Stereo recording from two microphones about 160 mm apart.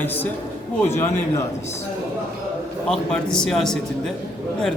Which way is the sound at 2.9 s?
5° left (ahead or behind).